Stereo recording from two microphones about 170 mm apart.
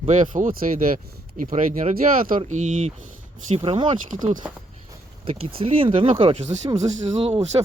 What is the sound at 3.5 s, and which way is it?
Speech, 35° right (ahead or behind).